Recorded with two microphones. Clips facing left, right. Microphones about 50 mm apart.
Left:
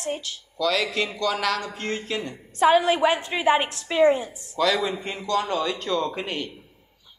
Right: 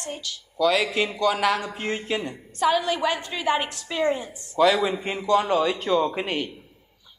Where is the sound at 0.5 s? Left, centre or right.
Centre.